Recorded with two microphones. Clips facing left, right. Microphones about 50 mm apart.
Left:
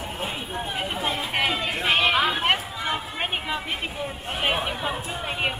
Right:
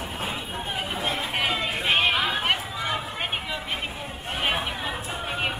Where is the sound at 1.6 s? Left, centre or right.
Centre.